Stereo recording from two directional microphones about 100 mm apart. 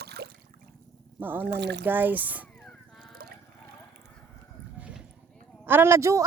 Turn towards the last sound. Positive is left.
turn(degrees=-30)  # may be behind; listen again after turning